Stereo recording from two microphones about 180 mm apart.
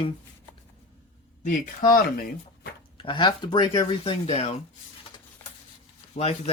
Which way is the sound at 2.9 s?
30° left (ahead or behind).